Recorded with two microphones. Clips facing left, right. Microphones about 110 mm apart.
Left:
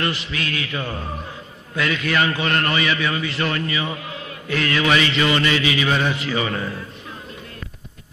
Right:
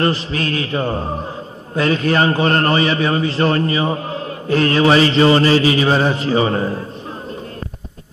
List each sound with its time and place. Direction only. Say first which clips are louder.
0.0 s a man's voice: right 7 dB; 35° right (ahead or behind)